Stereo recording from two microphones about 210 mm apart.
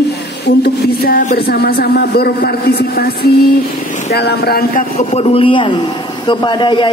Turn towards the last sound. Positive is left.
turn(degrees=20)  # may be behind; listen again after turning